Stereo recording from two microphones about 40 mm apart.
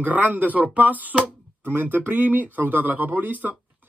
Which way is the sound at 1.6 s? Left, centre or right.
Right.